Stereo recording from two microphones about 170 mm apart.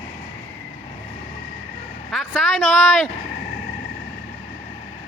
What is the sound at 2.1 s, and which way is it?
Speech, centre (ahead or behind).